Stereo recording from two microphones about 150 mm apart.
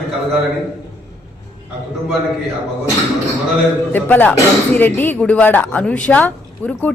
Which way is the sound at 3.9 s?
10° left (ahead or behind).